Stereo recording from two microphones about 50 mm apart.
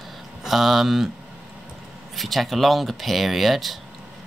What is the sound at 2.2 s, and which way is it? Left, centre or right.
Speech, centre.